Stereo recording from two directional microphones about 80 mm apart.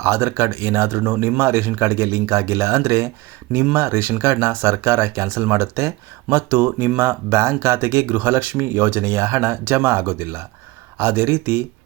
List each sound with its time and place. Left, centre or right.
0.0 s a man's voice: right
3.5 s a man's voice: right